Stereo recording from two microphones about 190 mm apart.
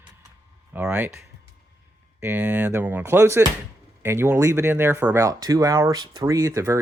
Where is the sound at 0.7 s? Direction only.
5° right (ahead or behind).